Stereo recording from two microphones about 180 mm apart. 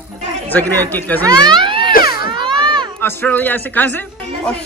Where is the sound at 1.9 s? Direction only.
55° left (ahead or behind).